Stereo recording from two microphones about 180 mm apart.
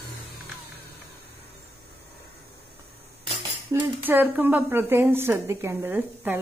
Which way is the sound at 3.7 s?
10° right (ahead or behind).